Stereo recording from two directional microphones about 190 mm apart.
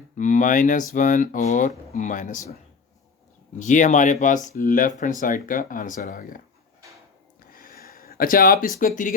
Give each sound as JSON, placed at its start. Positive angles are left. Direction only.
{"t": 0.2, "sound": "speech", "side_deg": 40}
{"t": 3.6, "sound": "speech", "side_deg": 40}
{"t": 7.5, "sound": "a sound", "side_deg": 50}